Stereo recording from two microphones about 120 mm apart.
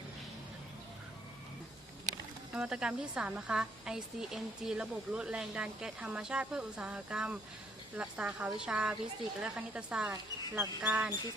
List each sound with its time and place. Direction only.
2.5 s a woman's voice: 5° right (ahead or behind)
10.1 s speech: 20° right (ahead or behind)
10.8 s a woman's voice: 10° right (ahead or behind)